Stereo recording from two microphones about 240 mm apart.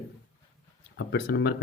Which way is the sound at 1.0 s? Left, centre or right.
Left.